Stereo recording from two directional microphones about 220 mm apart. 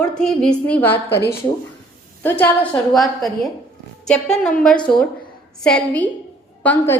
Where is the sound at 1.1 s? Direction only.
50° left (ahead or behind).